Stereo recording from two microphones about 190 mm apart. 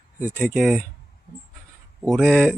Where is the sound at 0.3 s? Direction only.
Centre (ahead or behind).